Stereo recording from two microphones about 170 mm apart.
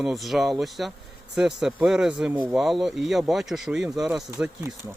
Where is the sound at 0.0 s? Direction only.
Centre (ahead or behind).